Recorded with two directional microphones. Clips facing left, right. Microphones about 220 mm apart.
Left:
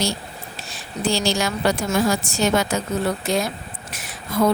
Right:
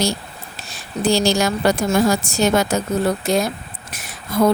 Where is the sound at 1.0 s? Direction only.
40° right (ahead or behind).